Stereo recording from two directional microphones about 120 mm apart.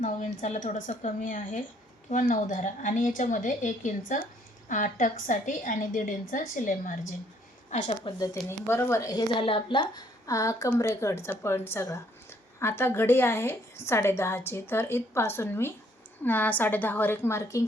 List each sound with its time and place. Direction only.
0.0 s a woman's voice: 80° left
7.7 s a woman's voice: 75° left (ahead or behind)
8.6 s speech: 20° left (ahead or behind)
9.4 s a woman's voice: 45° left (ahead or behind)
10.2 s a woman's voice: 25° left (ahead or behind)